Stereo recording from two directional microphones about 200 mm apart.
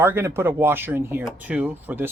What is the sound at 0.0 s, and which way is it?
Speech, 10° right (ahead or behind).